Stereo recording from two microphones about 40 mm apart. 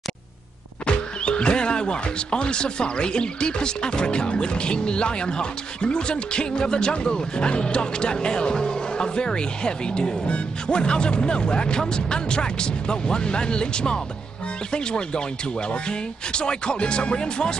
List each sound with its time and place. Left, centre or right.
0.8 s speech: left